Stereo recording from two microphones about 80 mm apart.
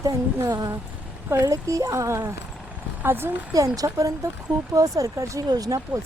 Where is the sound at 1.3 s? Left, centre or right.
Right.